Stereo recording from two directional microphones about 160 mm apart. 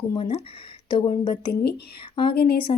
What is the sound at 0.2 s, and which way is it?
A woman's voice, 40° left (ahead or behind).